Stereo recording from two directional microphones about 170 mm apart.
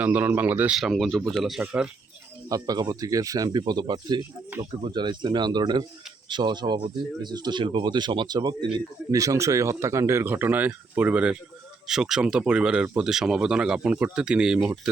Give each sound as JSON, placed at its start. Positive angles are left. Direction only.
{"t": 0.0, "sound": "speech", "side_deg": -10}
{"t": 2.5, "sound": "speech", "side_deg": -20}